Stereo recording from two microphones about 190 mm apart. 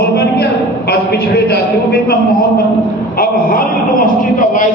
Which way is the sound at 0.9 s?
60° left (ahead or behind).